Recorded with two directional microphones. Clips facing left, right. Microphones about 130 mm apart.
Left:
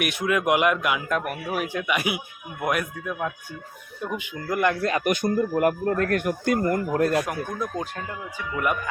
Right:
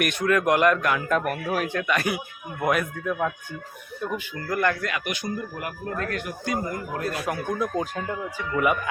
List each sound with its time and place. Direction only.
0.0 s a man's voice: 10° left (ahead or behind)
4.0 s a man's voice: 15° left (ahead or behind)
4.8 s speech: 35° left (ahead or behind); by 6.7 s 55° left (ahead or behind)
7.0 s speech: centre (ahead or behind)